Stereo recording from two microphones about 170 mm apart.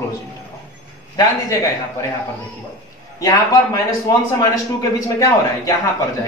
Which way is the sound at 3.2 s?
20° left (ahead or behind).